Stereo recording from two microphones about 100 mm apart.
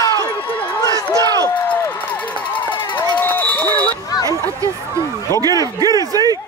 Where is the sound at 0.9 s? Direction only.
35° right (ahead or behind).